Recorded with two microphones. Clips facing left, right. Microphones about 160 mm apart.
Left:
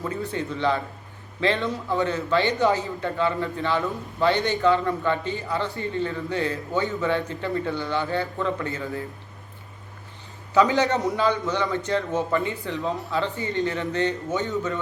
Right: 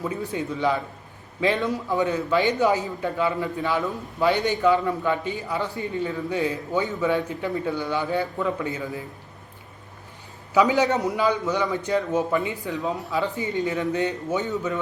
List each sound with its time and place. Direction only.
0.0 s speech: 15° right (ahead or behind)
10.5 s speech: 10° right (ahead or behind)